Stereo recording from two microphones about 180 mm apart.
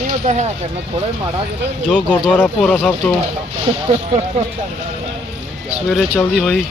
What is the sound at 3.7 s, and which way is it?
Speech, 35° right (ahead or behind).